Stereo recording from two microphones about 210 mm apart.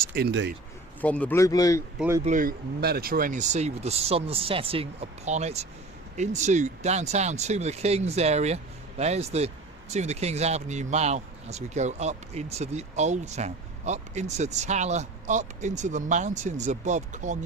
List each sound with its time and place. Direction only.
0.0 s speech: 45° right (ahead or behind)
1.0 s a man's voice: 5° left (ahead or behind)
2.0 s speech: 10° right (ahead or behind)
2.2 s speech: 40° right (ahead or behind)